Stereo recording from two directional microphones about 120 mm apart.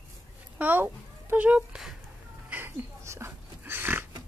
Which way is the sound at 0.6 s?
15° right (ahead or behind).